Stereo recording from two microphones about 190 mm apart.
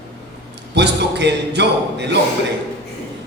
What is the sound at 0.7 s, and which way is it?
A man's voice, 65° right (ahead or behind).